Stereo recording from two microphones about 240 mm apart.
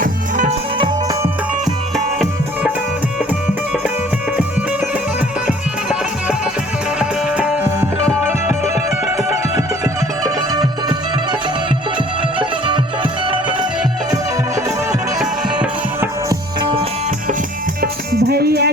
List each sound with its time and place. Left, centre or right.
0.0 s music: right
5.5 s music: centre
9.8 s music: centre
12.4 s music: centre
15.5 s music: centre
18.3 s music: right